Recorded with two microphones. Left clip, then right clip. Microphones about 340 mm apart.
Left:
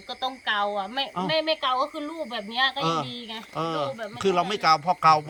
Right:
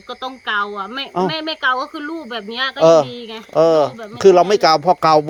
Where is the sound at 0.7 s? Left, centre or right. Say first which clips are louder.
Right 6 dB; left.